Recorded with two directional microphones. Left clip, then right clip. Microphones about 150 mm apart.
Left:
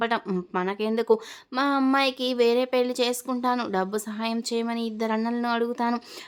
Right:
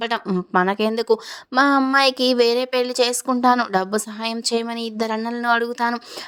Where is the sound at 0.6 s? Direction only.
45° right (ahead or behind).